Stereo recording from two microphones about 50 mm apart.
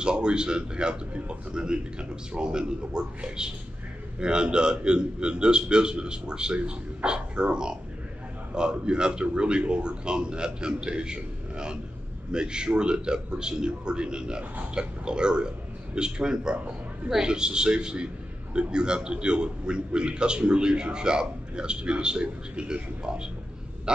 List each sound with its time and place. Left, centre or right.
0.0 s a man's voice: centre